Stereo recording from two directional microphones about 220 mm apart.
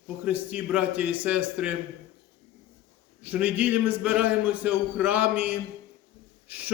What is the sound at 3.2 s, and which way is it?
A man's voice, 5° right (ahead or behind).